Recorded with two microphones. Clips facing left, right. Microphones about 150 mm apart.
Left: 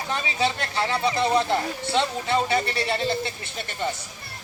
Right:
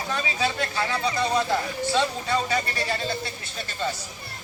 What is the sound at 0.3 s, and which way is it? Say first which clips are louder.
Speech: left 2 dB; 25° left (ahead or behind).